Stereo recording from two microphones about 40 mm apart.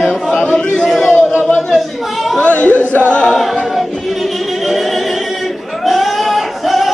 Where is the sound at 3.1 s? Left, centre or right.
Left.